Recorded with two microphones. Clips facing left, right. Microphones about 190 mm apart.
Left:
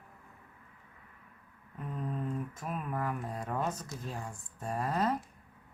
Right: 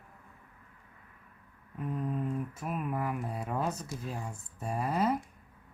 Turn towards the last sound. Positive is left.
turn(degrees=-10)  # may be behind; listen again after turning